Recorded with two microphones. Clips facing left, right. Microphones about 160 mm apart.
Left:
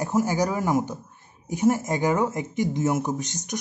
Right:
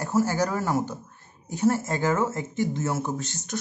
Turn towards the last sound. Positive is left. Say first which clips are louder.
# left 1 dB
turn(degrees=15)  # may be behind; listen again after turning